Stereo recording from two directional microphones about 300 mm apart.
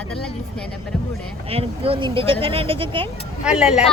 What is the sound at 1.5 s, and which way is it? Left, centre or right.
Speech, centre.